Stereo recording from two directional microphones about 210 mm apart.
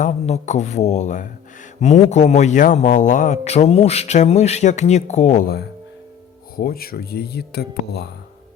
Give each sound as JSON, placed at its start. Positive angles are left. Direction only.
{"t": 0.0, "sound": "a man's voice", "side_deg": 35}